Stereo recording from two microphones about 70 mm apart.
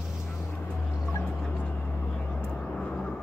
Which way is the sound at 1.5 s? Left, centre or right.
Left.